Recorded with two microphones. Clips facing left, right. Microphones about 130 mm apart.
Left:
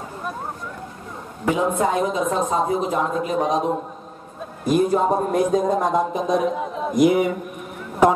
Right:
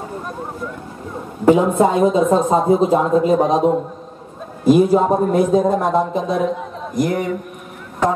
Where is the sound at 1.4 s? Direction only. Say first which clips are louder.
Right 7 dB; 30° right (ahead or behind).